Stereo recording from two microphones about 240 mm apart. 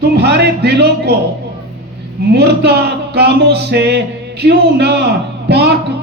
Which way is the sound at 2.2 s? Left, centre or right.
Right.